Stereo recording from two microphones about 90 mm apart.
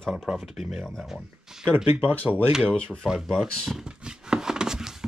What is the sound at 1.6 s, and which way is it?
Speech, 25° right (ahead or behind).